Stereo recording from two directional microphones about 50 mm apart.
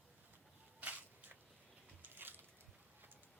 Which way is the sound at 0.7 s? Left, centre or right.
Right.